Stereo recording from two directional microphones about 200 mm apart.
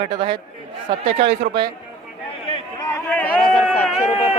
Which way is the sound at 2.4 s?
30° left (ahead or behind).